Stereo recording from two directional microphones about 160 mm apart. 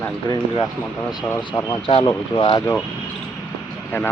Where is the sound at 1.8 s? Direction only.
30° left (ahead or behind).